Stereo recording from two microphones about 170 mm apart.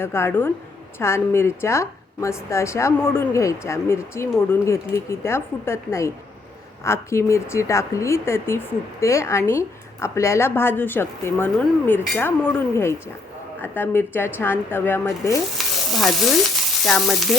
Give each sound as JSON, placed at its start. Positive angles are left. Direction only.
{"t": 0.0, "sound": "a woman's voice", "side_deg": 15}
{"t": 15.5, "sound": "stir", "side_deg": 0}
{"t": 16.8, "sound": "frying", "side_deg": 0}